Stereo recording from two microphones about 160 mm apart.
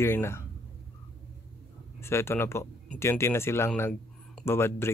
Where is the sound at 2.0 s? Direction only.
15° left (ahead or behind).